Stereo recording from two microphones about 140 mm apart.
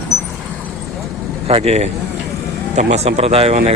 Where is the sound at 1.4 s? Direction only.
50° right (ahead or behind).